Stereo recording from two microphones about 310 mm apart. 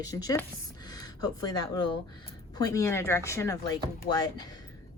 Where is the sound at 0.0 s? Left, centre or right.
Centre.